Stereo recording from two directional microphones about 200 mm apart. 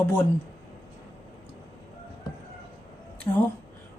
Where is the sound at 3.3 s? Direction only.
15° left (ahead or behind).